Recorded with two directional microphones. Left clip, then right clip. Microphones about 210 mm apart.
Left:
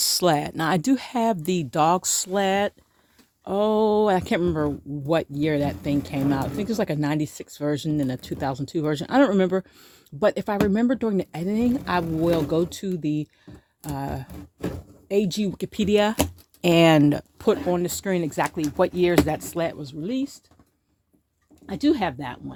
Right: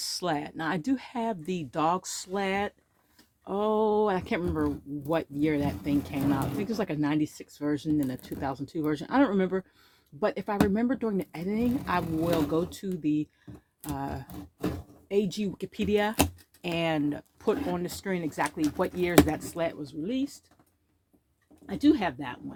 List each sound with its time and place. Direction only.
0.0 s speech: 55° left (ahead or behind)
21.7 s speech: 40° left (ahead or behind)